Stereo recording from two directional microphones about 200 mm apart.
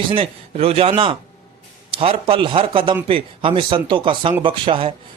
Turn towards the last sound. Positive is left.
turn(degrees=-25)  # may be behind; listen again after turning